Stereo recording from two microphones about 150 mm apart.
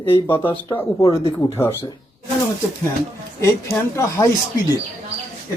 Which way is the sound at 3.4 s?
20° left (ahead or behind).